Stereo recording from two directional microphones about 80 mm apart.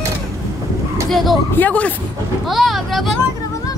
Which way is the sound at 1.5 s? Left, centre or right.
Left.